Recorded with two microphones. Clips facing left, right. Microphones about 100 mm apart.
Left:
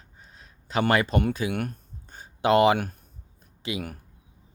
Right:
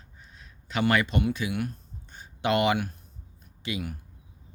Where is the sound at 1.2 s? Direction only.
50° left (ahead or behind).